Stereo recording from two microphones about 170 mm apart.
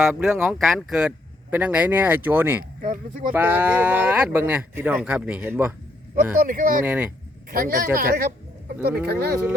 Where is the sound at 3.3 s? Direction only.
10° right (ahead or behind).